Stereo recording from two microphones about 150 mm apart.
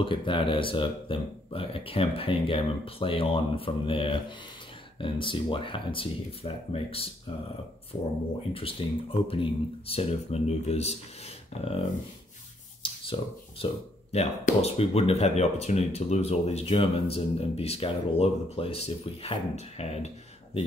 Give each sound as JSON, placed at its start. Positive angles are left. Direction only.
{"t": 0.0, "sound": "speech", "side_deg": 35}
{"t": 8.5, "sound": "speech", "side_deg": 35}
{"t": 12.8, "sound": "a sound", "side_deg": 35}
{"t": 14.1, "sound": "speech", "side_deg": 45}